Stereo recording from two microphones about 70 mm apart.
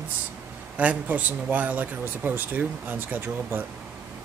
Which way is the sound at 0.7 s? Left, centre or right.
Right.